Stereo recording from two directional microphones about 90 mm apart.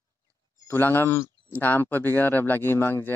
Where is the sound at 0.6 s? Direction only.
25° left (ahead or behind).